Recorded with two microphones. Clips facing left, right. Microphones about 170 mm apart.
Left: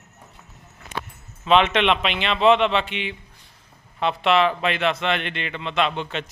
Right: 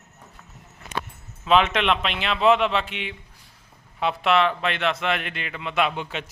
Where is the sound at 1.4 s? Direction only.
Centre (ahead or behind).